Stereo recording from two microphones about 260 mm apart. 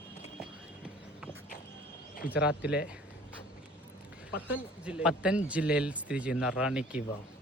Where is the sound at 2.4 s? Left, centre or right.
Left.